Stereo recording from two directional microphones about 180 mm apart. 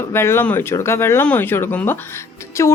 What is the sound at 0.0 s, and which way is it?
A woman's voice, 15° left (ahead or behind).